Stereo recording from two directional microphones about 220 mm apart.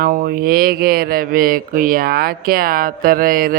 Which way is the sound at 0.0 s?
40° right (ahead or behind).